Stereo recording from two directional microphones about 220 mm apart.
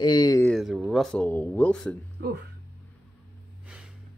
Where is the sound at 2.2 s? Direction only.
45° right (ahead or behind).